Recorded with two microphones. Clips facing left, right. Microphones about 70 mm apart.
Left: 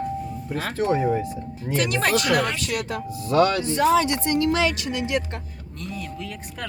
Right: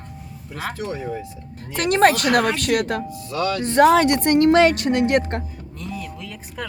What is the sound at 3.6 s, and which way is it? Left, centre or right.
Speech, right.